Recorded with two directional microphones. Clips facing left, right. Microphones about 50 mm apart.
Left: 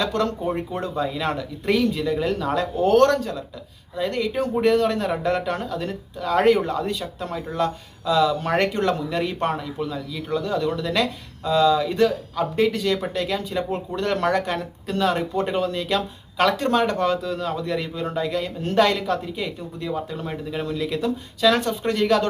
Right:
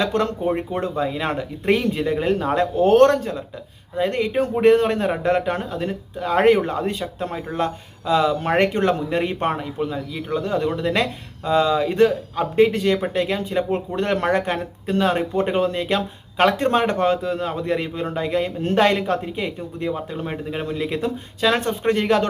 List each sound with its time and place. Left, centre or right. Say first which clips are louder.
0.0 s speech: right 2 dB; right